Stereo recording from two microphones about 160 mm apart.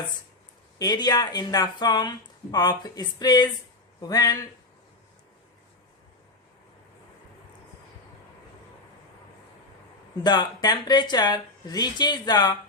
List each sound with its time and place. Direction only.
0.8 s speech: 25° left (ahead or behind)
10.2 s speech: 25° left (ahead or behind)